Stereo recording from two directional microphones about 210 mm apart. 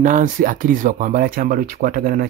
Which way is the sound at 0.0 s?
40° right (ahead or behind).